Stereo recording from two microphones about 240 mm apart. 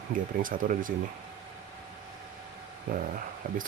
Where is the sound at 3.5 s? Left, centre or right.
Right.